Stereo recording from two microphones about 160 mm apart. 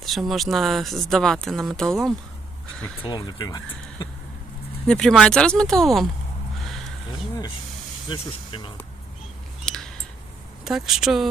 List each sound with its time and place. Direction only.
0.0 s speech: centre (ahead or behind)
3.0 s speech: 25° left (ahead or behind)
4.9 s speech: 5° left (ahead or behind)
6.7 s a sound: centre (ahead or behind)
8.1 s speech: 30° left (ahead or behind)
9.6 s a sound: 5° left (ahead or behind)
10.6 s speech: centre (ahead or behind)